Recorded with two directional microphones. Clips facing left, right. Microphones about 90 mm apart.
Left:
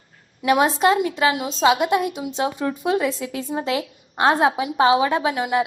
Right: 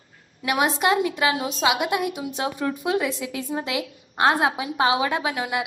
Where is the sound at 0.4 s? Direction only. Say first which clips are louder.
Left 4 dB; 30° left (ahead or behind).